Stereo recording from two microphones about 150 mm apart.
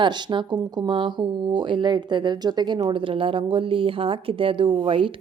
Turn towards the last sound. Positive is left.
turn(degrees=-35)  # may be behind; listen again after turning